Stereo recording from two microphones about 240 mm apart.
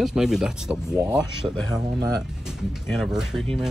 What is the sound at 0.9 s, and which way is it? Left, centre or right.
Speech, centre.